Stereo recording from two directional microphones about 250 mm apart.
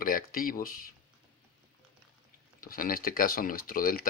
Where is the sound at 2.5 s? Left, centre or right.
Left.